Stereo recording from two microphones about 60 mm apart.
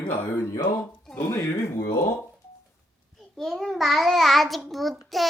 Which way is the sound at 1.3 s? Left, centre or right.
Left.